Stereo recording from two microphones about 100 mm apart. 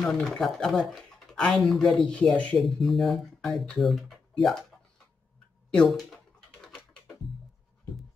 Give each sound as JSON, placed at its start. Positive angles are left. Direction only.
{"t": 0.0, "sound": "speech", "side_deg": 5}